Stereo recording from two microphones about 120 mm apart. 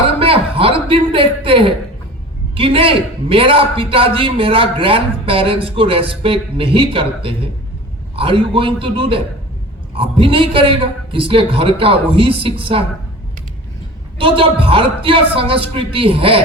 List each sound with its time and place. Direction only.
0.2 s a sound: 50° right (ahead or behind)
2.6 s a man's voice: 50° right (ahead or behind)
14.2 s a man's voice: 45° right (ahead or behind)